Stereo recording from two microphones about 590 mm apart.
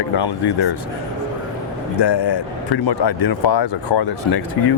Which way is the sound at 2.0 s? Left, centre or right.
Left.